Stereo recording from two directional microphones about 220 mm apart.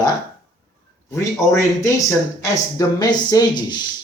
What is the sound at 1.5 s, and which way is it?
Speech, 15° left (ahead or behind).